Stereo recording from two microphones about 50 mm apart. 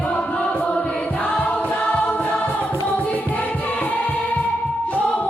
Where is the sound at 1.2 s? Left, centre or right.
Left.